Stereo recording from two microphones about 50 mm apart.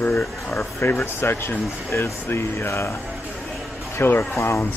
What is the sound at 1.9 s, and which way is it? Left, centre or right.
Speech, left.